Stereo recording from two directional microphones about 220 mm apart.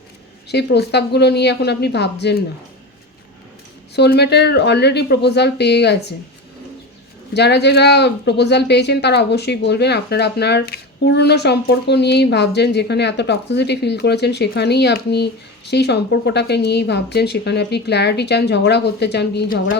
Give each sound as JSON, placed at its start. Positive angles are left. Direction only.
{"t": 0.4, "sound": "speech", "side_deg": 50}
{"t": 3.9, "sound": "speech", "side_deg": 50}
{"t": 7.3, "sound": "speech", "side_deg": 50}